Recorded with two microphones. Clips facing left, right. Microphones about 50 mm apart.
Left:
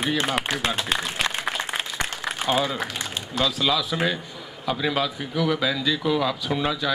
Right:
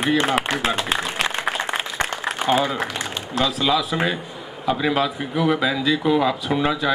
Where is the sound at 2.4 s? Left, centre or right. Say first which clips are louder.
Right 4 dB; centre.